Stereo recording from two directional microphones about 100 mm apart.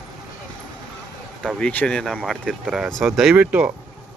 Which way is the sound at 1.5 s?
10° left (ahead or behind).